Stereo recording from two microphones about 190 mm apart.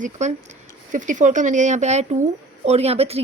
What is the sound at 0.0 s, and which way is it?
Speech, 40° right (ahead or behind).